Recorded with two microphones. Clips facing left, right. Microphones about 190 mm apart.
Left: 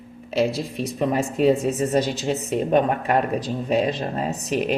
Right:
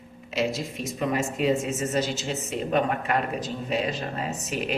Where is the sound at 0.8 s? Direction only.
35° left (ahead or behind).